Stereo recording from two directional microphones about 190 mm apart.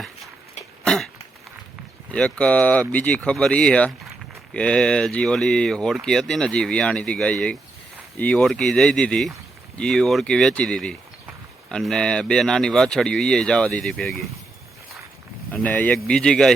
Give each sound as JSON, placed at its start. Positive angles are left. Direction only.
{"t": 0.9, "sound": "throat clearing", "side_deg": 5}
{"t": 2.1, "sound": "speech", "side_deg": 5}
{"t": 15.5, "sound": "speech", "side_deg": 10}